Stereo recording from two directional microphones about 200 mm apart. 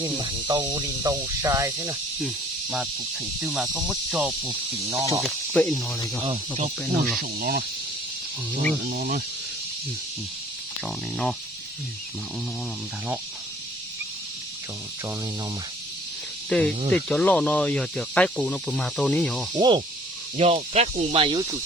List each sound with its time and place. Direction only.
0.0 s speech: 20° right (ahead or behind)
5.2 s speech: centre (ahead or behind)
7.2 s cricket: 50° right (ahead or behind)
8.9 s cricket: 45° right (ahead or behind)
10.8 s speech: 5° left (ahead or behind)
16.5 s speech: 5° left (ahead or behind)
19.5 s speech: 25° right (ahead or behind)